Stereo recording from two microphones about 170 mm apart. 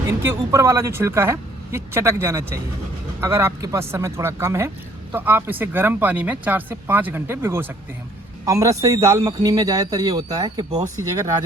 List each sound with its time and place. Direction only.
0.1 s a man's voice: 15° right (ahead or behind)